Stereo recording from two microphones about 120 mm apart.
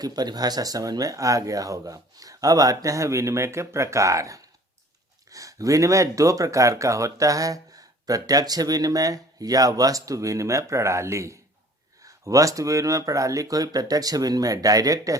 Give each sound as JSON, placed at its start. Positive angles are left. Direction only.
{"t": 0.0, "sound": "speech", "side_deg": -35}